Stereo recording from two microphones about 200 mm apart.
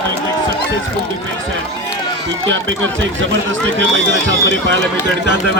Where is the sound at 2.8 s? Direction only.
70° right (ahead or behind).